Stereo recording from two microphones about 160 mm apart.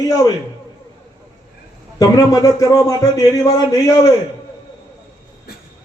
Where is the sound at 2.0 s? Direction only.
20° left (ahead or behind).